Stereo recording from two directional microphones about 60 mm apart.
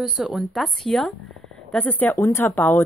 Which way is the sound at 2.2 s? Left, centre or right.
Left.